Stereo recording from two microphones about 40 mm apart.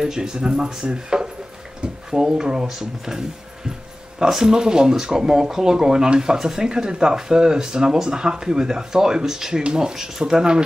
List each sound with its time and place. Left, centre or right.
0.0 s speech: centre
4.2 s speech: centre